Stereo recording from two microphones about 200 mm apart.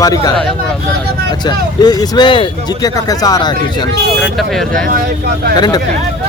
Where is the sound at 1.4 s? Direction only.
20° left (ahead or behind).